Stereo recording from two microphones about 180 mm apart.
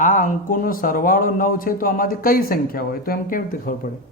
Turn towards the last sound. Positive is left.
turn(degrees=50)  # may be behind; listen again after turning